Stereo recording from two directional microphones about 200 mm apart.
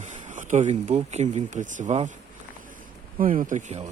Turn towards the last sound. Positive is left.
turn(degrees=-40)  # may be behind; listen again after turning